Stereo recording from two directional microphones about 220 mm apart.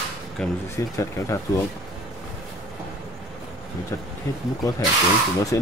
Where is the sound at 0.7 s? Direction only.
15° left (ahead or behind).